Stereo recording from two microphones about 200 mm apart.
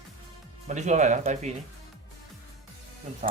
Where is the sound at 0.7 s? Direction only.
35° right (ahead or behind).